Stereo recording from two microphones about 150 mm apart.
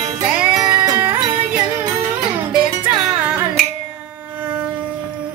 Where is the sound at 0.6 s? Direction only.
25° right (ahead or behind).